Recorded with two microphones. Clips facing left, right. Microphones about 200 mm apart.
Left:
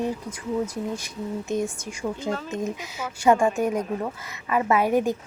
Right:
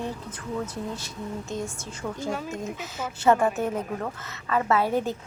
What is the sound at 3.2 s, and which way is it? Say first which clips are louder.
Speech: left 2 dB; 15° left (ahead or behind).